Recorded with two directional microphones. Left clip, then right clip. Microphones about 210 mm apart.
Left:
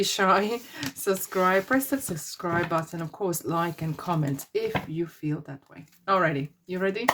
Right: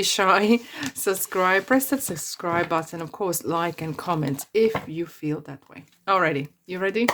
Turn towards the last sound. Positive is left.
turn(degrees=-35)  # may be behind; listen again after turning